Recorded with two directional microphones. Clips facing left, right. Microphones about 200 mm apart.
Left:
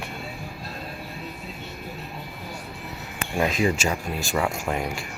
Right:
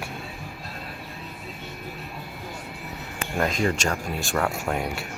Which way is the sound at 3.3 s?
5° left (ahead or behind).